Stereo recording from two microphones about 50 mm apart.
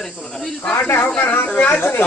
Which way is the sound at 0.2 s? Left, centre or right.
Centre.